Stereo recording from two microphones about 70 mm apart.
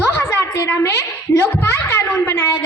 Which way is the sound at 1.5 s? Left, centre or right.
Left.